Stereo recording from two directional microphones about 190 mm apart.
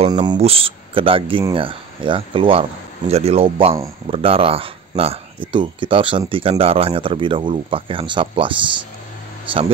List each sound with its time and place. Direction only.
0.1 s speech: 25° right (ahead or behind)